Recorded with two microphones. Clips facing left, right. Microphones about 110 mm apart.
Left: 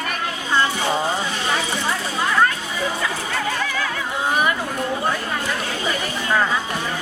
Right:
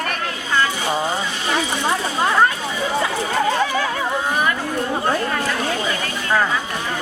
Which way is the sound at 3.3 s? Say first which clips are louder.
Right 5 dB; 30° right (ahead or behind).